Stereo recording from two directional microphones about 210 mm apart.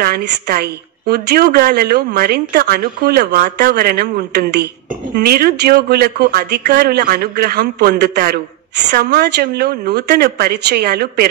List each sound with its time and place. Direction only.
0.0 s speech: 45° right (ahead or behind)